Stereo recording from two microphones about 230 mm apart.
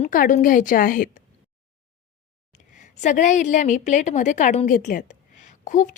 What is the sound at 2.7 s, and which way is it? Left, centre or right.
A woman's voice, left.